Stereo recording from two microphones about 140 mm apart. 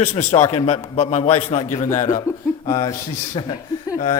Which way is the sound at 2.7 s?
25° left (ahead or behind).